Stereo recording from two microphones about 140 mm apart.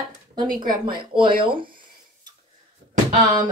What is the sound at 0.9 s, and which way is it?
Speech, 35° right (ahead or behind).